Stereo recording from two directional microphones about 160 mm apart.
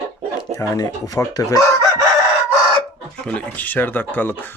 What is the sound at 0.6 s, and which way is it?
Speech, 20° left (ahead or behind).